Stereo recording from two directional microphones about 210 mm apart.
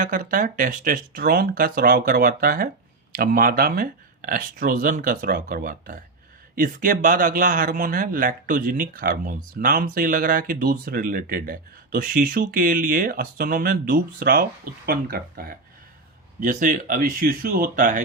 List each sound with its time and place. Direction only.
0.0 s a man's voice: 40° right (ahead or behind)